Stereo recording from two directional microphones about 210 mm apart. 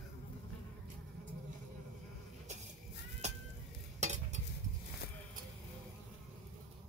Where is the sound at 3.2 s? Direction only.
35° right (ahead or behind).